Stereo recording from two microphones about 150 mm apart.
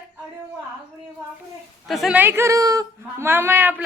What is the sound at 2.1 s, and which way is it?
Speech, 15° right (ahead or behind).